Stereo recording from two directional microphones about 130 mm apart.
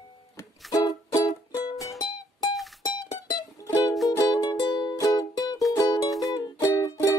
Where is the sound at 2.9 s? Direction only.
30° left (ahead or behind).